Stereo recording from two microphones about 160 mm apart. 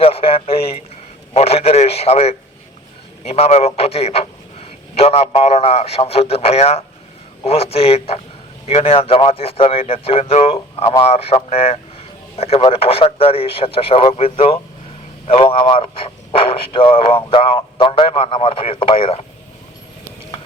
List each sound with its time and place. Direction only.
0.0 s speech: 35° left (ahead or behind)